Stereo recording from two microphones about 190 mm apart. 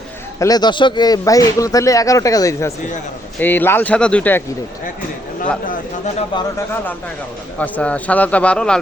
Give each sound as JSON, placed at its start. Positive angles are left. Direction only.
{"t": 0.3, "sound": "speech", "side_deg": 20}
{"t": 7.6, "sound": "speech", "side_deg": 5}